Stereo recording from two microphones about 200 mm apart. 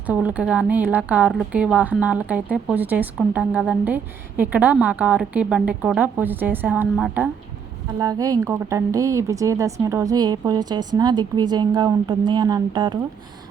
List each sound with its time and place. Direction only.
0.0 s a woman's voice: 10° right (ahead or behind)
7.9 s a woman's voice: 15° right (ahead or behind)